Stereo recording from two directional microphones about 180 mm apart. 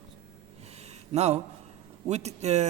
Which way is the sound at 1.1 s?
40° right (ahead or behind).